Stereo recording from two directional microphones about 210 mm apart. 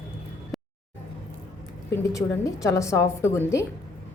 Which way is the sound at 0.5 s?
Centre (ahead or behind).